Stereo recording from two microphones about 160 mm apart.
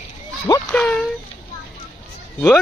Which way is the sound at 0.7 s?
5° left (ahead or behind).